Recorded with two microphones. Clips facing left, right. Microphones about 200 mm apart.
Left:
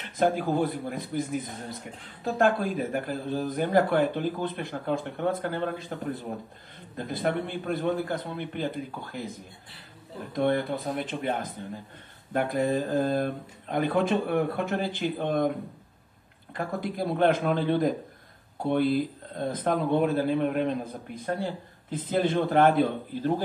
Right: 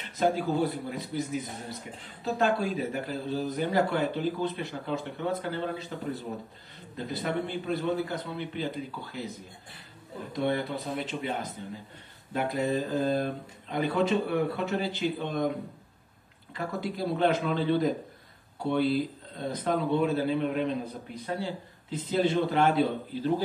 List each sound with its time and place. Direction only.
0.2 s speech: 50° left (ahead or behind)
10.3 s speech: 50° left (ahead or behind)
16.5 s speech: 50° left (ahead or behind)